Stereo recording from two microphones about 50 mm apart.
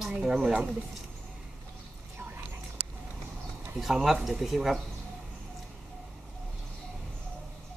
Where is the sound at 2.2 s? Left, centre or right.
Right.